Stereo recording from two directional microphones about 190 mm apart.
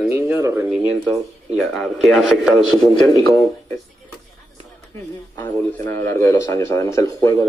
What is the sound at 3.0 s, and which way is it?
Speech, 15° left (ahead or behind).